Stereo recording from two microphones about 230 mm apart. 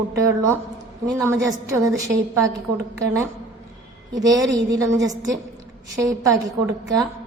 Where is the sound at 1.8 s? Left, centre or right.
Centre.